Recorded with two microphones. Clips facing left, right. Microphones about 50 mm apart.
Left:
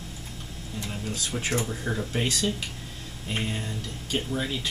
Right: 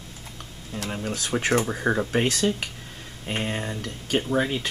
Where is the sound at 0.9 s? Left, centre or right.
Right.